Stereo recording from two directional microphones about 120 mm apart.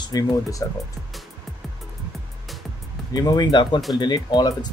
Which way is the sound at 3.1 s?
35° left (ahead or behind).